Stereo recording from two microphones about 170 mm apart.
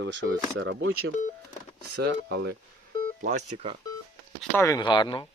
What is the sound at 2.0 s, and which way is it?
Speech, 75° right (ahead or behind).